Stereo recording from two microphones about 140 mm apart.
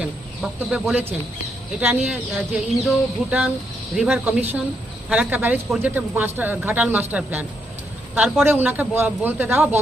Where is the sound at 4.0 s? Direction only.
5° right (ahead or behind).